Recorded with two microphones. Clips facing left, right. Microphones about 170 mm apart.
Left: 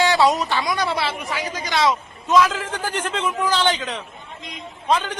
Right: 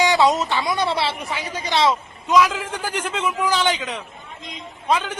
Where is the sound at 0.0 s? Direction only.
20° right (ahead or behind).